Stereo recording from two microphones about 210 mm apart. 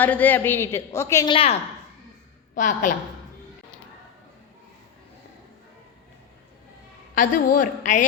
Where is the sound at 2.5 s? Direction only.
40° left (ahead or behind).